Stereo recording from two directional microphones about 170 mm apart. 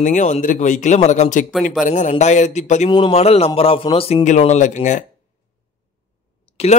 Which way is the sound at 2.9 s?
35° left (ahead or behind).